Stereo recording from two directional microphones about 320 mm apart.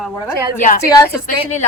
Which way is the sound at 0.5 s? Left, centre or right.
Left.